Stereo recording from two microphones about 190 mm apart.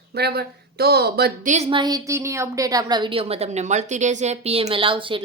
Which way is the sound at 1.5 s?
35° right (ahead or behind).